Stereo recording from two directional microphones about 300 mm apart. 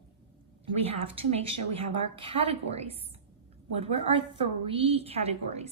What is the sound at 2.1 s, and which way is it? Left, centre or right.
A woman's voice, centre.